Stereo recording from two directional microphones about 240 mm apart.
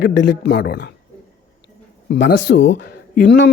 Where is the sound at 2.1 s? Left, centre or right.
Left.